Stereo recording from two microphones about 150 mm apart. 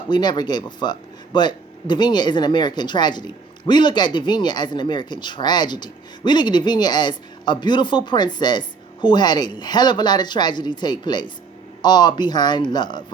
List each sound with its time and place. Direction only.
0.1 s speech: 30° left (ahead or behind)